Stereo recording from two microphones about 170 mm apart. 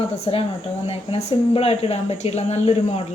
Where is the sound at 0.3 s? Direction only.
35° left (ahead or behind).